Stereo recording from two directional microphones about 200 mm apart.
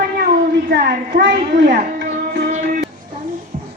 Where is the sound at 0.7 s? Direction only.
55° right (ahead or behind).